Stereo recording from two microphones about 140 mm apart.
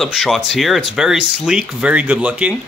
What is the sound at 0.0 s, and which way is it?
Speech, centre (ahead or behind).